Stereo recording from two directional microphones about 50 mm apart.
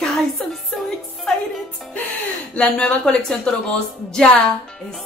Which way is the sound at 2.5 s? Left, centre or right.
Left.